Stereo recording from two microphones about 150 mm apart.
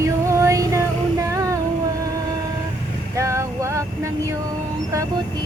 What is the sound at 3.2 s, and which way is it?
Vehicle, 20° right (ahead or behind).